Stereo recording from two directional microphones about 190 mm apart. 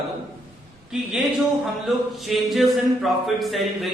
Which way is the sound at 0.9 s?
5° right (ahead or behind).